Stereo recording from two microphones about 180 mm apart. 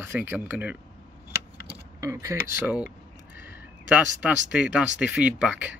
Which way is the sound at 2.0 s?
15° right (ahead or behind).